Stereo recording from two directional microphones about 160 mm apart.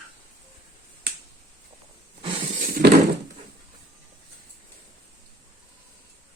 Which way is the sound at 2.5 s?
65° right (ahead or behind).